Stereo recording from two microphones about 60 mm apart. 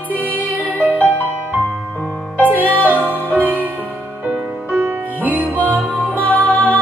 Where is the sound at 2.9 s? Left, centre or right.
Right.